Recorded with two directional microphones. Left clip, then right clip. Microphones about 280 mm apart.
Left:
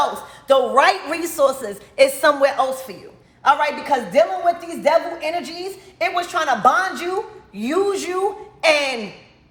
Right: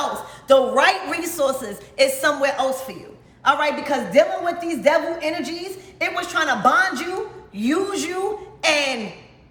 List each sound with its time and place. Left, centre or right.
0.4 s a woman's voice: centre